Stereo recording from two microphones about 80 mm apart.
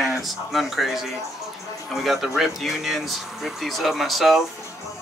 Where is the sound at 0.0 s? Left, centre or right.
Centre.